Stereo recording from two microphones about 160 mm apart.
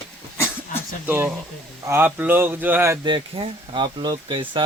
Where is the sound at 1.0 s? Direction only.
10° right (ahead or behind).